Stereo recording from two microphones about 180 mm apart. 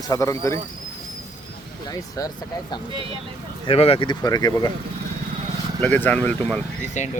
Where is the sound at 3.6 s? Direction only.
30° left (ahead or behind).